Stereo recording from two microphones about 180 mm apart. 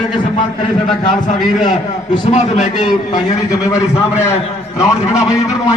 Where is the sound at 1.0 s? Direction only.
45° left (ahead or behind).